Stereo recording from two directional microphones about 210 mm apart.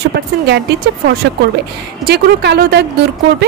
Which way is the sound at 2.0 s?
50° right (ahead or behind).